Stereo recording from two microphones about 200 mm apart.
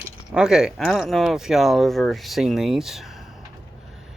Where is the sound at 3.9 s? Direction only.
Centre (ahead or behind).